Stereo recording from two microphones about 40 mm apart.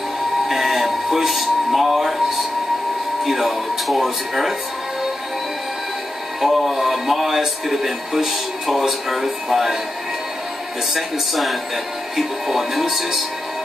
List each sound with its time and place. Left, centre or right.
0.5 s music: centre
3.3 s speech: centre
6.4 s speech: centre
11.0 s speech: centre